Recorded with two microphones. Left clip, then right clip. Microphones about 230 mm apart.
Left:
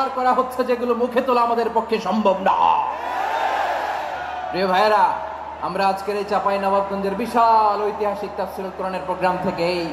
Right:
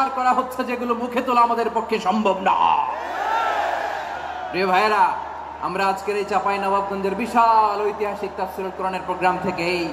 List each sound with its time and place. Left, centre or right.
0.0 s speech: right
4.6 s speech: right
9.2 s speech: right